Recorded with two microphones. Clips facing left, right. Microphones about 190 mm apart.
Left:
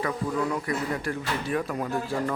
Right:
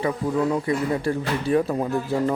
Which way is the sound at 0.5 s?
30° right (ahead or behind).